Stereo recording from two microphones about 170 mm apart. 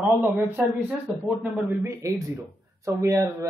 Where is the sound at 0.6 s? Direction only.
10° right (ahead or behind).